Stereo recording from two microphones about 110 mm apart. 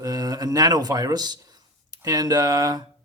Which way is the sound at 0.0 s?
35° right (ahead or behind).